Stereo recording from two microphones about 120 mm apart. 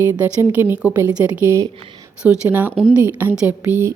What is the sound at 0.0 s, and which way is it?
A woman's voice, 15° right (ahead or behind).